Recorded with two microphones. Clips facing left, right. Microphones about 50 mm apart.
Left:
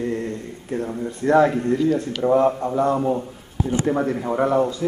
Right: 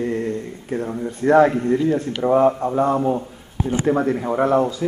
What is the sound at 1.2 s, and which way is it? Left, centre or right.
Speech, centre.